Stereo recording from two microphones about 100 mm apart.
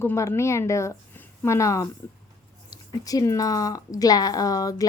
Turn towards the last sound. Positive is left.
turn(degrees=35)  # may be behind; listen again after turning